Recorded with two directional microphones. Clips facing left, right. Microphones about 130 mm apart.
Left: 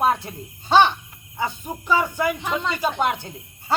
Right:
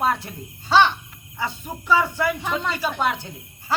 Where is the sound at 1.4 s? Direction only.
15° left (ahead or behind).